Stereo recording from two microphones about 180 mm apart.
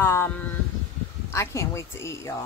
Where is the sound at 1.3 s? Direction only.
15° left (ahead or behind).